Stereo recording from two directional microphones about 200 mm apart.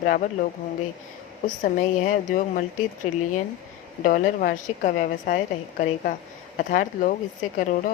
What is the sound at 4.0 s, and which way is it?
A woman's voice, 45° left (ahead or behind).